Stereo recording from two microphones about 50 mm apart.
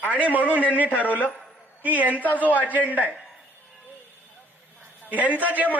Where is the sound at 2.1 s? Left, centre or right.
Left.